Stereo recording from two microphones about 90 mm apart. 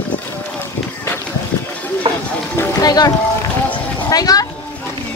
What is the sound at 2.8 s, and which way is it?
Speech, 45° left (ahead or behind).